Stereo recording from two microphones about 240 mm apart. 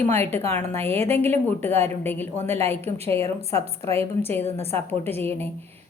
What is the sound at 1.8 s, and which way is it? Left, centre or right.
A woman's voice, centre.